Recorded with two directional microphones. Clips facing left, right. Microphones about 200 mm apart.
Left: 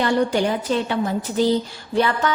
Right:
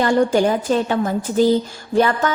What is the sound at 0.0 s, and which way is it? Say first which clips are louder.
A woman's voice: right 4 dB; 45° right (ahead or behind).